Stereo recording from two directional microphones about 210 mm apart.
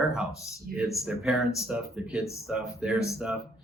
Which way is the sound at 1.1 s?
Centre (ahead or behind).